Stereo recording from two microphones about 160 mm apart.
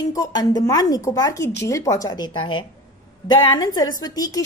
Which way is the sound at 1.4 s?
90° left.